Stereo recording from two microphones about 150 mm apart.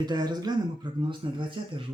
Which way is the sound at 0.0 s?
30° right (ahead or behind).